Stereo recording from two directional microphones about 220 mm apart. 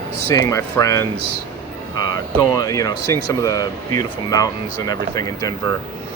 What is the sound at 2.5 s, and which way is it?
Speech, 15° left (ahead or behind).